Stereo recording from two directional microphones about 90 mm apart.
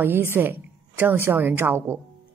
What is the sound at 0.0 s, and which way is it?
A woman's voice, 25° right (ahead or behind).